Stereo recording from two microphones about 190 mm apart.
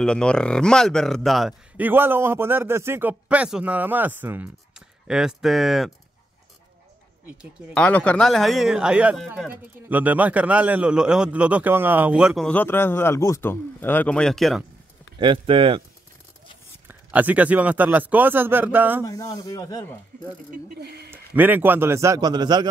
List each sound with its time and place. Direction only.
0.0 s speech: 5° left (ahead or behind)
7.7 s speech: 5° left (ahead or behind)
15.1 s speech: 25° right (ahead or behind)
16.8 s speech: 10° right (ahead or behind)
19.0 s speech: 20° left (ahead or behind)
20.8 s speech: 55° right (ahead or behind)
21.1 s speech: 10° right (ahead or behind)